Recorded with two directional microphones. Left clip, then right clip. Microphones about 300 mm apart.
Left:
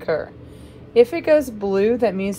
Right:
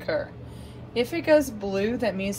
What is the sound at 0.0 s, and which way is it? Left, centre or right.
A woman's voice, left.